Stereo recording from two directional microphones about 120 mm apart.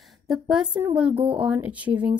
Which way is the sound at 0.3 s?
5° right (ahead or behind).